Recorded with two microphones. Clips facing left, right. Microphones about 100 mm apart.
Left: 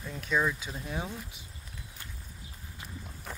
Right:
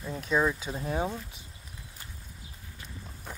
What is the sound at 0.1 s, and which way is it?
Speech, 30° right (ahead or behind).